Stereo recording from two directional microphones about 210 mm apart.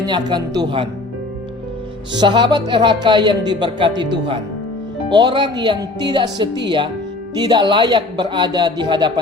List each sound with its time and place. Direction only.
0.0 s speech: 20° right (ahead or behind)
2.1 s speech: 20° right (ahead or behind)
5.0 s speech: 20° right (ahead or behind)